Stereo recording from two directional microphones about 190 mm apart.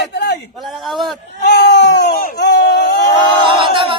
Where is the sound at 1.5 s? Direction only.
60° left (ahead or behind).